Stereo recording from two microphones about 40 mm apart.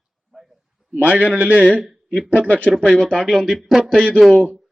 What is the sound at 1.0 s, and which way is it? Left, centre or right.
Speech, right.